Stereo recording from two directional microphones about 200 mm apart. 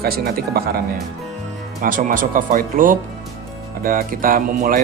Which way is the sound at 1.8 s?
45° right (ahead or behind).